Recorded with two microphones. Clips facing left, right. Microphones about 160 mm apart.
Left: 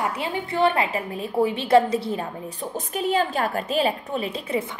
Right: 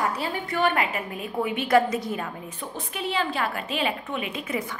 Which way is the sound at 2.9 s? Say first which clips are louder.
Left 5 dB; 45° left (ahead or behind).